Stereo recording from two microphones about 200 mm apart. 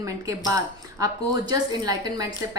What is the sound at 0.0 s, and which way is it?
Speech, 15° right (ahead or behind).